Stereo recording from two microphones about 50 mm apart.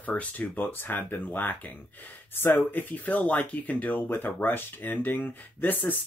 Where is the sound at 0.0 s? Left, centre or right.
Left.